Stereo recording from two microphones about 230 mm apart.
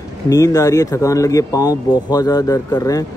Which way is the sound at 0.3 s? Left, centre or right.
Centre.